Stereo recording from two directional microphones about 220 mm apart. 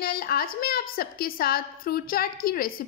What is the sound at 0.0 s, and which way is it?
A woman's voice, 45° left (ahead or behind).